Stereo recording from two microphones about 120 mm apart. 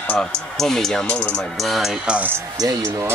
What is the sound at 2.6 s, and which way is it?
Speech, 25° right (ahead or behind).